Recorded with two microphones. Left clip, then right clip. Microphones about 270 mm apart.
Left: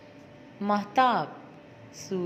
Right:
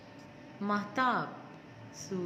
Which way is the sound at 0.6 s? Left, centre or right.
Centre.